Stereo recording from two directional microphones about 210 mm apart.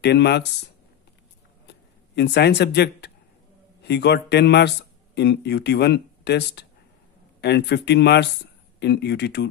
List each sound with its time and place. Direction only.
0.0 s speech: 55° left (ahead or behind)
1.7 s speech: 55° left (ahead or behind)